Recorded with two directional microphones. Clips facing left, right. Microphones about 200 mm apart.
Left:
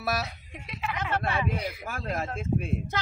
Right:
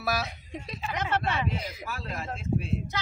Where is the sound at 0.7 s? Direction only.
40° right (ahead or behind).